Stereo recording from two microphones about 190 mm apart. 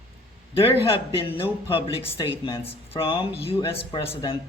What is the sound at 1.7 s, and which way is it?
Speech, 30° left (ahead or behind).